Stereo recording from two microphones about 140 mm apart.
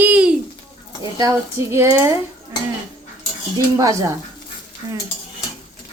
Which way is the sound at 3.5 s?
25° right (ahead or behind).